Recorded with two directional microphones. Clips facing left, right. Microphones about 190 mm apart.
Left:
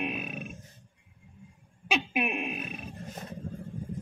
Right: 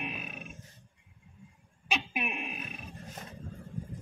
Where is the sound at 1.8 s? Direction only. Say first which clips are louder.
Left 5 dB; 60° left (ahead or behind).